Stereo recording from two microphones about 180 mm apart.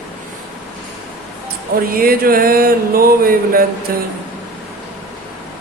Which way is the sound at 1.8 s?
55° right (ahead or behind).